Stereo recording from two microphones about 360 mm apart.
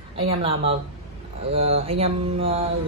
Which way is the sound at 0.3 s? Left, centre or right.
Centre.